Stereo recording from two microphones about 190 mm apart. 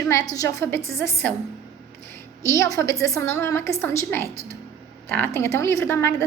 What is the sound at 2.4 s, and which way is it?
A woman's voice, 15° left (ahead or behind).